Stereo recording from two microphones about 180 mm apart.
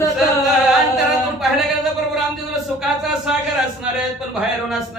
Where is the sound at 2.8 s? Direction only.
Centre (ahead or behind).